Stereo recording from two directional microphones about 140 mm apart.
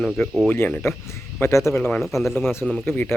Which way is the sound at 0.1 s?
5° right (ahead or behind).